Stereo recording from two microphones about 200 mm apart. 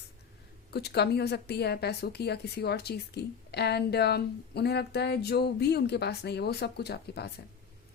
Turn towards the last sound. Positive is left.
turn(degrees=55)  # may be behind; listen again after turning